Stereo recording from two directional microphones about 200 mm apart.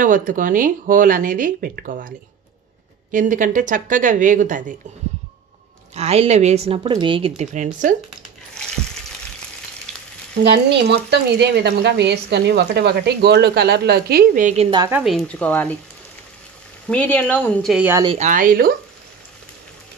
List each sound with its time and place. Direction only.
0.0 s speech: 40° right (ahead or behind)
5.9 s speech: 30° right (ahead or behind)
9.9 s frying: 5° left (ahead or behind)
10.4 s speech: 60° right (ahead or behind); by 14.7 s 40° right (ahead or behind)
14.9 s speech: 5° right (ahead or behind)
16.8 s speech: 5° left (ahead or behind)
18.0 s speech: 35° right (ahead or behind)